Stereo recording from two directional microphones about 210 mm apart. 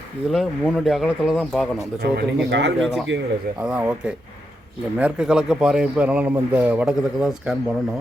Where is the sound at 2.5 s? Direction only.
55° right (ahead or behind).